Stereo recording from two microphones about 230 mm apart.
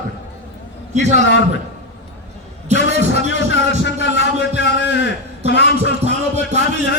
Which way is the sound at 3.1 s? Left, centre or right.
Left.